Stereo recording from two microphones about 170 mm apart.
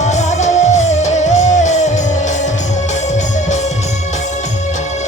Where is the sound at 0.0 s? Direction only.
45° left (ahead or behind).